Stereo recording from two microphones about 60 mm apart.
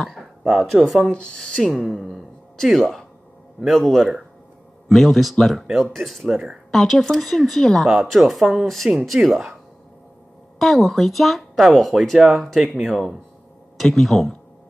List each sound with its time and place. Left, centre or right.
0.0 s speech: centre
1.1 s speech: centre
1.9 s speech: centre
10.6 s speech: centre